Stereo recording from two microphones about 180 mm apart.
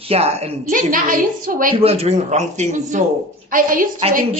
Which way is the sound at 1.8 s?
35° right (ahead or behind).